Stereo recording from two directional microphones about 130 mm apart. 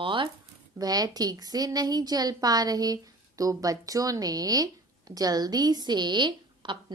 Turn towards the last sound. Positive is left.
turn(degrees=-35)  # may be behind; listen again after turning